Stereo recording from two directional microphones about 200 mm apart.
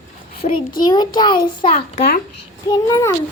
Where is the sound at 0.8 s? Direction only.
20° left (ahead or behind).